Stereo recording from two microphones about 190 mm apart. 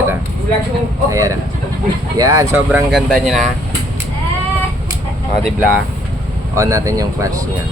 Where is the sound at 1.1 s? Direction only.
15° right (ahead or behind).